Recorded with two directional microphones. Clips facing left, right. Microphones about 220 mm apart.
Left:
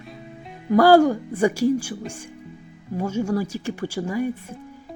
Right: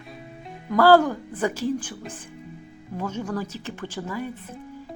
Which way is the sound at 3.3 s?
10° left (ahead or behind).